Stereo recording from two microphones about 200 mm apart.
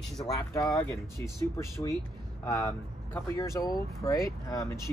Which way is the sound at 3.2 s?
15° left (ahead or behind).